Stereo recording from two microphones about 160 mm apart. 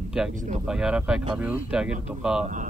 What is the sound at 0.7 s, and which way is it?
Speech, 5° right (ahead or behind).